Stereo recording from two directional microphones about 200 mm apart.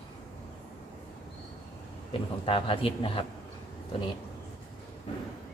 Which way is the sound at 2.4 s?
25° left (ahead or behind).